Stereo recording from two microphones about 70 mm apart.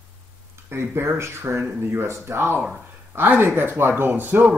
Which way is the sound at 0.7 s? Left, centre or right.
Right.